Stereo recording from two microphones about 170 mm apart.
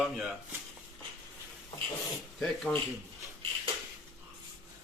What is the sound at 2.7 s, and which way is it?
Speech, 5° left (ahead or behind).